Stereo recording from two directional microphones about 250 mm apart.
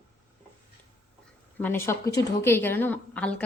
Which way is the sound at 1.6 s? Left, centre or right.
Centre.